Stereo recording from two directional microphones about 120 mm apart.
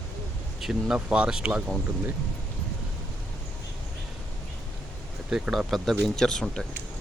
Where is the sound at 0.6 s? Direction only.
5° right (ahead or behind).